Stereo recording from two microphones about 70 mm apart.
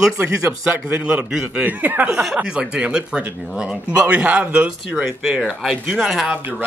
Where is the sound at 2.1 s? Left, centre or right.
Centre.